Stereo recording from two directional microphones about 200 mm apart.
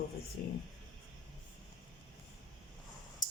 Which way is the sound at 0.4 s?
50° left (ahead or behind).